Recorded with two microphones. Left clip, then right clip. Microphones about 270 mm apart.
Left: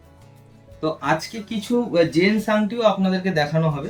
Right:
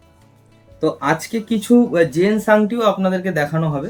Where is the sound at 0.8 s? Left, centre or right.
Centre.